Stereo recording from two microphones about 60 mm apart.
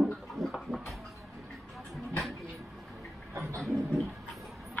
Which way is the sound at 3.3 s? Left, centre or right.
Right.